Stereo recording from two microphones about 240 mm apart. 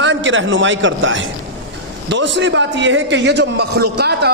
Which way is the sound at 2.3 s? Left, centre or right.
Right.